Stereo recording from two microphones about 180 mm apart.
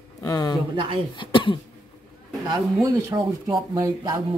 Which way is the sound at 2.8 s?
20° right (ahead or behind).